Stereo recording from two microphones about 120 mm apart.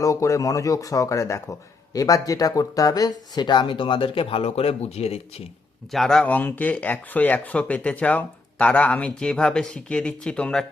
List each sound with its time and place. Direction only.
0.0 s speech: 25° left (ahead or behind); by 5.2 s 60° left (ahead or behind)
5.9 s speech: centre (ahead or behind)